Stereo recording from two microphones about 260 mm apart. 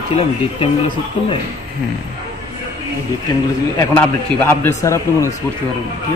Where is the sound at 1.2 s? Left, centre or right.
Left.